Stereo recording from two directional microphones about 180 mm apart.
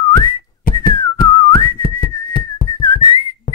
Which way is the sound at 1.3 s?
25° left (ahead or behind).